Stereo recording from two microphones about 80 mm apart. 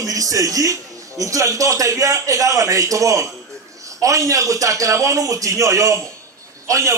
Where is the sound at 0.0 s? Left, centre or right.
Right.